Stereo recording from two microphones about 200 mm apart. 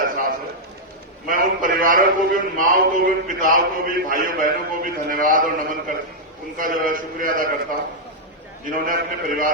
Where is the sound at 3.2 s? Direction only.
40° right (ahead or behind).